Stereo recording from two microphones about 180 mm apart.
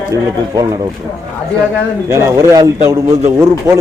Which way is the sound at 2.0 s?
15° right (ahead or behind).